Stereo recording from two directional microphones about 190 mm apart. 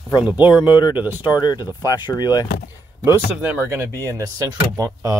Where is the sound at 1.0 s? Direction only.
10° right (ahead or behind).